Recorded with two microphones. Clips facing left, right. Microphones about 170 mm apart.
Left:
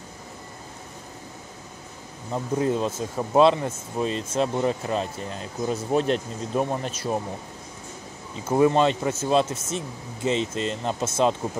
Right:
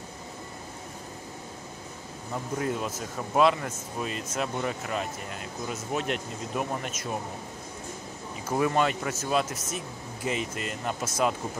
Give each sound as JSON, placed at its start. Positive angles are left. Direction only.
{"t": 2.3, "sound": "speech", "side_deg": 25}
{"t": 8.5, "sound": "speech", "side_deg": 25}